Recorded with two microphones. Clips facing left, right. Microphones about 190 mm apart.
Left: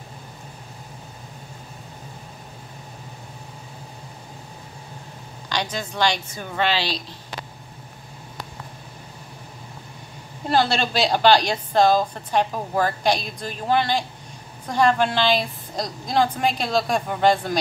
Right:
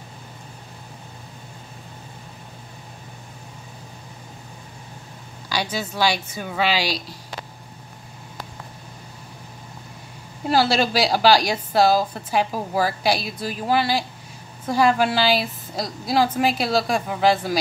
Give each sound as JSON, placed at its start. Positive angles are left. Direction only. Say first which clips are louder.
{"t": 5.5, "sound": "a woman's voice", "louder": "right 1 dB", "side_deg": -10}
{"t": 10.5, "sound": "a woman's voice", "louder": "right 2 dB", "side_deg": -10}